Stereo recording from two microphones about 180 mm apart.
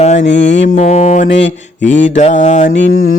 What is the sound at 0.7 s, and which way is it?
Speech, 50° left (ahead or behind).